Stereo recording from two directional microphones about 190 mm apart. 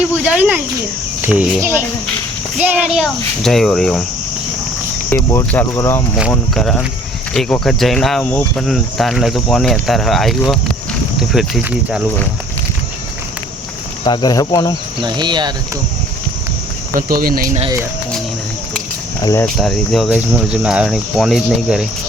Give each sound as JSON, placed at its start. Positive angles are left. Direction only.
{"t": 0.1, "sound": "speech", "side_deg": -10}
{"t": 5.0, "sound": "speech", "side_deg": 10}
{"t": 6.3, "sound": "speech", "side_deg": 0}
{"t": 14.0, "sound": "speech", "side_deg": 25}
{"t": 15.0, "sound": "speech", "side_deg": -25}
{"t": 16.9, "sound": "speech", "side_deg": -50}
{"t": 19.2, "sound": "speech", "side_deg": 15}
{"t": 19.5, "sound": "speech", "side_deg": 0}